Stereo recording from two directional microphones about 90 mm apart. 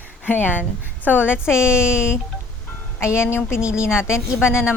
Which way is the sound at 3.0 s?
30° left (ahead or behind).